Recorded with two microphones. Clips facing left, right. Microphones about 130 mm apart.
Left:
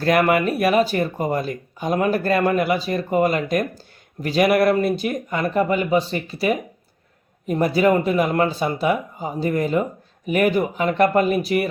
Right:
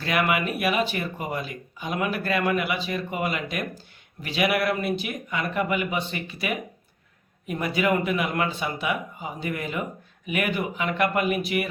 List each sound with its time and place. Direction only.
0.0 s speech: 45° left (ahead or behind)